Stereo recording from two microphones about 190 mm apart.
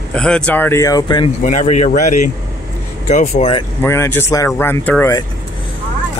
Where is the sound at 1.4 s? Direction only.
35° left (ahead or behind).